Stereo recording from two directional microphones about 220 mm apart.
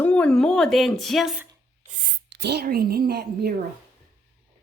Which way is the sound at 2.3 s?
50° right (ahead or behind).